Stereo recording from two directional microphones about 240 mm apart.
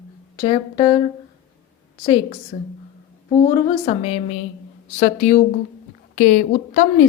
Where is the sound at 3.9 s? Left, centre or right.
Left.